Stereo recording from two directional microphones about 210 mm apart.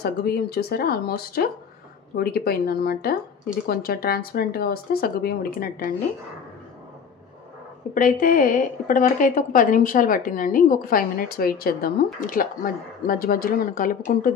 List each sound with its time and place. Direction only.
0.0 s speech: 50° left (ahead or behind)
7.9 s a woman's voice: 40° left (ahead or behind)